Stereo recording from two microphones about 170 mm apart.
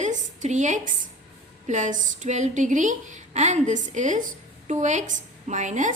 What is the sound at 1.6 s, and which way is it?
A woman's voice, 45° right (ahead or behind).